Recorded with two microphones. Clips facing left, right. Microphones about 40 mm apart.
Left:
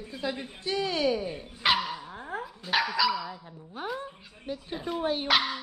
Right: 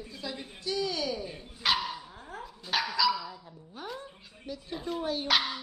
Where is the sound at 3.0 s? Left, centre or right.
Centre.